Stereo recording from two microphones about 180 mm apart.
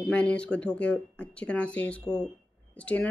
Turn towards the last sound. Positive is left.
turn(degrees=5)  # may be behind; listen again after turning